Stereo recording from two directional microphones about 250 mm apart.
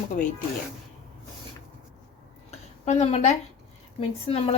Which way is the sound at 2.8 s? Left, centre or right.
Left.